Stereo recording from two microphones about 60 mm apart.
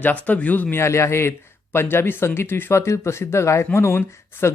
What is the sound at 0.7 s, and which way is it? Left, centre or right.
Speech, left.